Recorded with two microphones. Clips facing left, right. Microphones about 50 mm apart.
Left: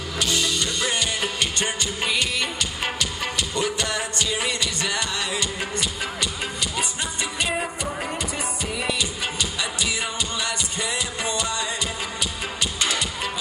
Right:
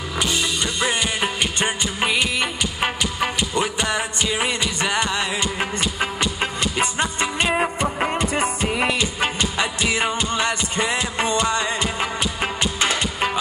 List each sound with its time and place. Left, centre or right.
0.2 s music: right